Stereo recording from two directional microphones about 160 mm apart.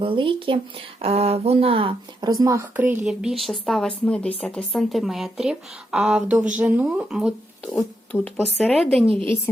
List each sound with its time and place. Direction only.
0.0 s speech: 35° right (ahead or behind); by 7.7 s 5° right (ahead or behind)
7.7 s speech: 10° left (ahead or behind)